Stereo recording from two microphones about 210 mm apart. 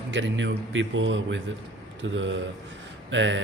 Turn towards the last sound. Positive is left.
turn(degrees=-60)  # may be behind; listen again after turning